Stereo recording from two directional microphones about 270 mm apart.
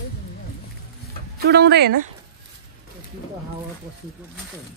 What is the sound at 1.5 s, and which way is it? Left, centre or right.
Speech, right.